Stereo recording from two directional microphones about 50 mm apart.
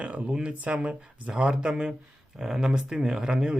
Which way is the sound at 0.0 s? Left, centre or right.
Right.